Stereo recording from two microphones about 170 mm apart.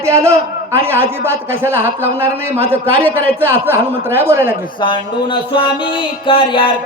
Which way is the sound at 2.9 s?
10° left (ahead or behind).